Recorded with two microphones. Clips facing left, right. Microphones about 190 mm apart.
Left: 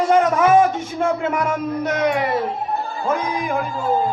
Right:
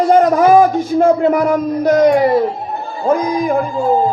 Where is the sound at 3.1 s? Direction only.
35° right (ahead or behind).